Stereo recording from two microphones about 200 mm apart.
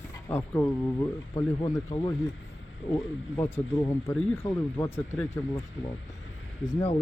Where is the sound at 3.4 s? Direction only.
10° left (ahead or behind).